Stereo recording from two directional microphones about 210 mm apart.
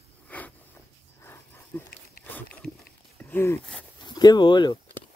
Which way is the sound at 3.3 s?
10° left (ahead or behind).